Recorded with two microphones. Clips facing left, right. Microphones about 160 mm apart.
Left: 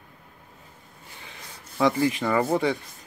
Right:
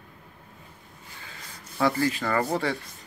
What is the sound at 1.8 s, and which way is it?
Speech, 20° left (ahead or behind).